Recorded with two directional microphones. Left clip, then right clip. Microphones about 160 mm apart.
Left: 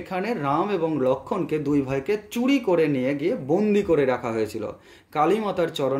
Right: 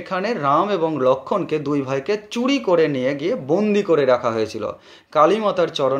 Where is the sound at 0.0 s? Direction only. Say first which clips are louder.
Right 5 dB; 25° left (ahead or behind).